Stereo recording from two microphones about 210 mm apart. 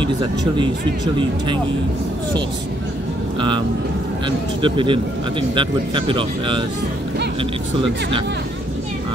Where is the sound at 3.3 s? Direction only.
25° right (ahead or behind).